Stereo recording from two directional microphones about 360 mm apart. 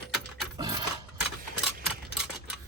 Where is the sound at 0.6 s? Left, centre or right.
Centre.